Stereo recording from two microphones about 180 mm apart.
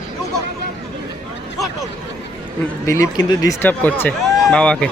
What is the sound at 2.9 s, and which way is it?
A man's voice, 20° left (ahead or behind).